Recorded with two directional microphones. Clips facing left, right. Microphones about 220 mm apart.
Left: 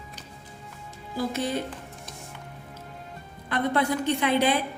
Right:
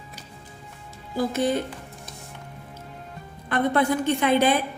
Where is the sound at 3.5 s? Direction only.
50° right (ahead or behind).